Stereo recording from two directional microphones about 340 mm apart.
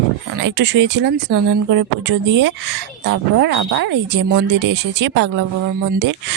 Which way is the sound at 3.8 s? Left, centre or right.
Right.